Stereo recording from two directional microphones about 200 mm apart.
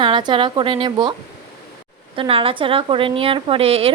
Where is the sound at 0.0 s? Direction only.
25° right (ahead or behind).